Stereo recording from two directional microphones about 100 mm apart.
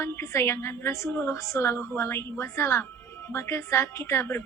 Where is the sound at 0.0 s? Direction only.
25° left (ahead or behind).